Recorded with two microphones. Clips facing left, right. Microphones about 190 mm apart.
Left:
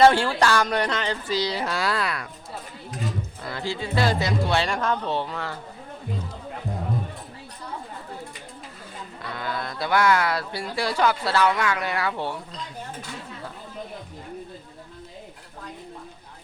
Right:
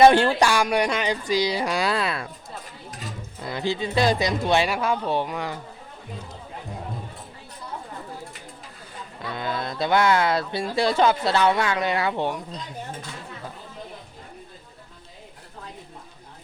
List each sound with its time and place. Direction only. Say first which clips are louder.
0.0 s speech: right 2 dB; 20° right (ahead or behind)
3.4 s speech: right 5 dB; 20° right (ahead or behind)
9.3 s speech: right 2 dB; 20° right (ahead or behind)